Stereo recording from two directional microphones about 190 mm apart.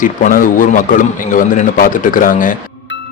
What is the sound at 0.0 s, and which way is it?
A man's voice, 45° left (ahead or behind).